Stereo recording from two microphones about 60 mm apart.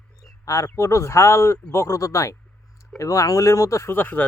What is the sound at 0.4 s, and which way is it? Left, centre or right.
Speech, left.